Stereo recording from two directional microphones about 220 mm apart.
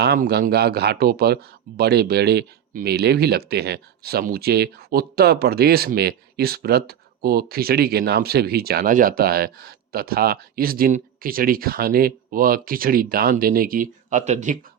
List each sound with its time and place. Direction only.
0.0 s speech: 45° right (ahead or behind)